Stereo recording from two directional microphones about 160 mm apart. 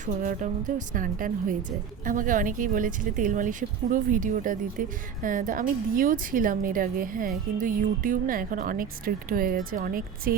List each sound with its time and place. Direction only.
0.0 s speech: 55° right (ahead or behind)